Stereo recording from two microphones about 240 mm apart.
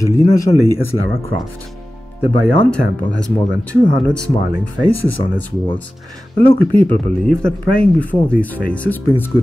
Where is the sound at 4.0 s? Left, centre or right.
Centre.